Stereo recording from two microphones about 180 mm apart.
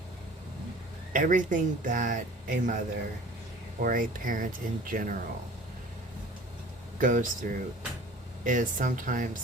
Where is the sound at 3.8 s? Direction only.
50° right (ahead or behind).